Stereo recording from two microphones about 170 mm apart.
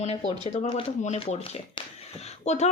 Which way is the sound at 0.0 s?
35° left (ahead or behind).